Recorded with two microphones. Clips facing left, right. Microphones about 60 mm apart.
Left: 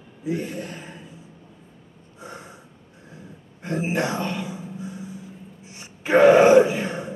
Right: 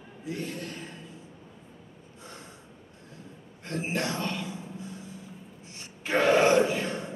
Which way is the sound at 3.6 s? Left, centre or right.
Centre.